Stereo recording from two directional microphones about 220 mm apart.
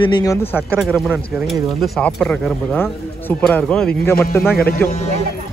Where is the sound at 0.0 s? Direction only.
20° left (ahead or behind).